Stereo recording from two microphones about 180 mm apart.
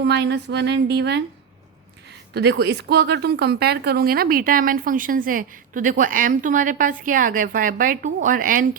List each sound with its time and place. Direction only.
0.0 s a woman's voice: 70° right (ahead or behind)
2.3 s speech: 65° right (ahead or behind); by 8.6 s 50° right (ahead or behind)